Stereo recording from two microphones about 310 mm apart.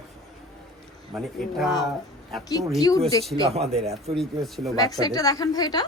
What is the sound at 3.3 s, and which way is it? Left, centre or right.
Speech, centre.